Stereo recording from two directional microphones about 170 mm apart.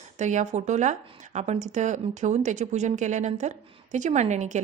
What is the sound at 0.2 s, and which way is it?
Speech, 45° right (ahead or behind).